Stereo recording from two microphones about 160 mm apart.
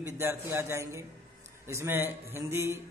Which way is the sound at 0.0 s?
15° right (ahead or behind).